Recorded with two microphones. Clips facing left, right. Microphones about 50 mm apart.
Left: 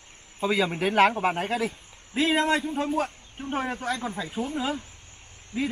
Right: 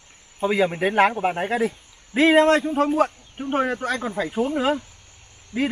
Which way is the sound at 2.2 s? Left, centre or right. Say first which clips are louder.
Right 7 dB; right.